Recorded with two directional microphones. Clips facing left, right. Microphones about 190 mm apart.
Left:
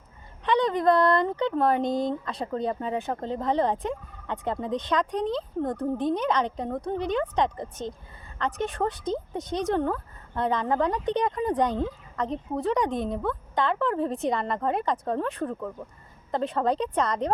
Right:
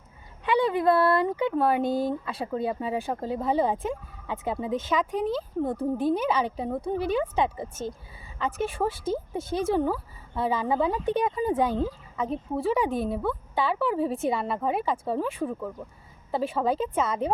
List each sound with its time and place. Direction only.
0.4 s a woman's voice: 10° right (ahead or behind)